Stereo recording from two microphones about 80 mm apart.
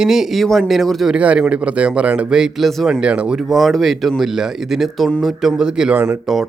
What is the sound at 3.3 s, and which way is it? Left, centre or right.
Speech, centre.